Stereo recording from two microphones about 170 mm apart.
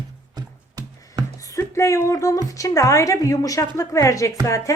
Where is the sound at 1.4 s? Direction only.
20° left (ahead or behind).